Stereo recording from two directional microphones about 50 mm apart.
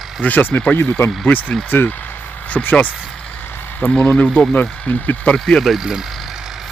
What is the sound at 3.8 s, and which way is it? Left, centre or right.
Speech, centre.